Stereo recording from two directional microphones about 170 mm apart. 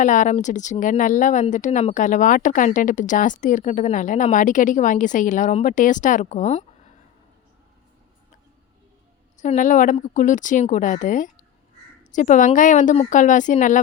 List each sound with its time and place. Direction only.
0.0 s speech: 50° left (ahead or behind)
9.4 s speech: 45° left (ahead or behind)